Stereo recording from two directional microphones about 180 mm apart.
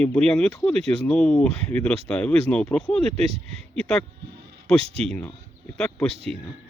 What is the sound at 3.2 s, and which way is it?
Speech, 35° right (ahead or behind).